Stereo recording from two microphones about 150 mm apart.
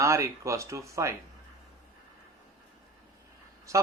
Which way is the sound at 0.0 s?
20° right (ahead or behind).